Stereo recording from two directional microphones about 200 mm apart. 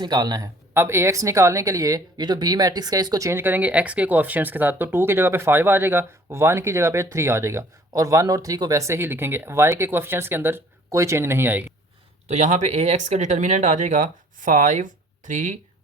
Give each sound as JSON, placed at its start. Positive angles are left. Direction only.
{"t": 0.0, "sound": "speech", "side_deg": -20}
{"t": 12.3, "sound": "speech", "side_deg": -35}